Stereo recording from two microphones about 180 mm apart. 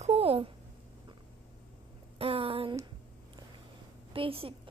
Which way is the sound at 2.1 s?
30° right (ahead or behind).